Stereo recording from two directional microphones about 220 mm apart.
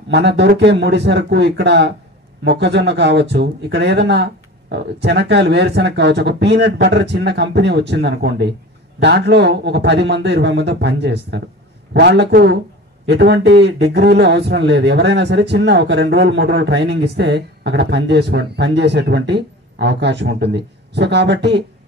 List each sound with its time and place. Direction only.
0.1 s a man's voice: 50° right (ahead or behind)